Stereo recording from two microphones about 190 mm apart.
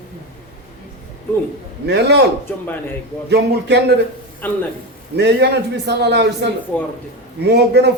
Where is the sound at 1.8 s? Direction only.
60° right (ahead or behind).